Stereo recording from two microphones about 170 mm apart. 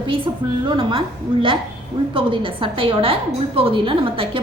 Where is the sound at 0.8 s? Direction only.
30° right (ahead or behind).